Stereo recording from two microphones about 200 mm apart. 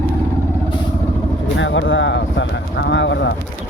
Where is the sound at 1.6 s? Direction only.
70° left (ahead or behind).